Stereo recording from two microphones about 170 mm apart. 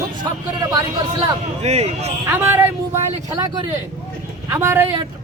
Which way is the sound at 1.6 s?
40° right (ahead or behind).